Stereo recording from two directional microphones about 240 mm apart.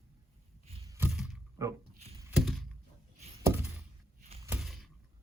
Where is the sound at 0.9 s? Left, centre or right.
Centre.